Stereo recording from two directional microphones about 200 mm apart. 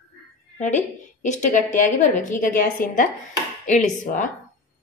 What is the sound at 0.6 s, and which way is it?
A woman's voice, 35° left (ahead or behind).